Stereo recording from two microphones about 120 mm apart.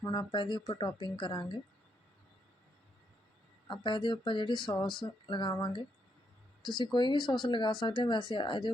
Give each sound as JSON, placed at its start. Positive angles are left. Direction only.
{"t": 0.0, "sound": "speech", "side_deg": 35}
{"t": 3.7, "sound": "speech", "side_deg": 40}